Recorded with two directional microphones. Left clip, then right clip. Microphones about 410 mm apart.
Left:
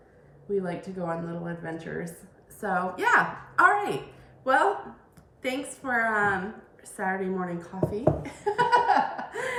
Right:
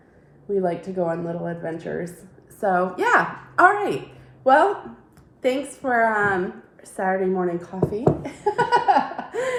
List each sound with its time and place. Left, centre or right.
0.5 s speech: centre
5.4 s a woman's voice: centre